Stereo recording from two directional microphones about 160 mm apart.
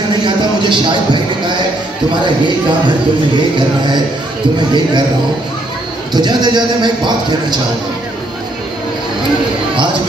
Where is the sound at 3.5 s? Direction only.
30° right (ahead or behind).